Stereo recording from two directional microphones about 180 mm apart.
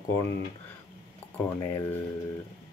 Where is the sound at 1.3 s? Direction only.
10° left (ahead or behind).